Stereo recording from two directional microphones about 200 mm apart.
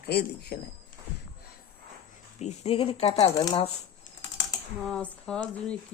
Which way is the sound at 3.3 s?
15° left (ahead or behind).